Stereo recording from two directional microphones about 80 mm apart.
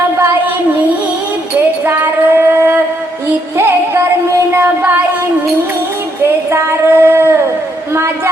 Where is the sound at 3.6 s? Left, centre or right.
Right.